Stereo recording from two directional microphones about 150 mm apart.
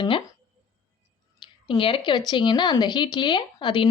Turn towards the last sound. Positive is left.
turn(degrees=30)  # may be behind; listen again after turning